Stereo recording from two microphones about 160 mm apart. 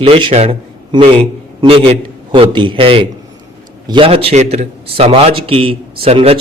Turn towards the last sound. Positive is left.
turn(degrees=-35)  # may be behind; listen again after turning